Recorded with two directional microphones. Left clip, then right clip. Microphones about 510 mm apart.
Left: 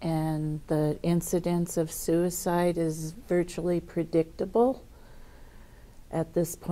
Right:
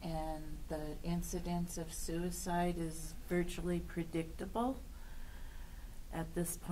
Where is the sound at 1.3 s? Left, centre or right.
Left.